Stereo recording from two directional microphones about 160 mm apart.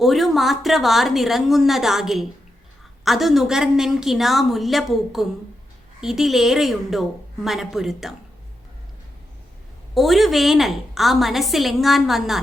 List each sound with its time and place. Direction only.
0.0 s a woman's voice: centre (ahead or behind)
9.9 s a woman's voice: centre (ahead or behind)